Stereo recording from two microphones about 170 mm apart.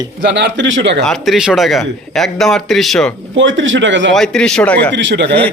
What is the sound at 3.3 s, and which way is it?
Speech, 90° right.